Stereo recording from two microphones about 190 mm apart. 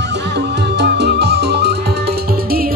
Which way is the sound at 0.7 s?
60° right (ahead or behind).